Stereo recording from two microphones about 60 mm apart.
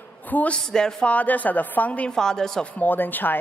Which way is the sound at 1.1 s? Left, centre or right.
Left.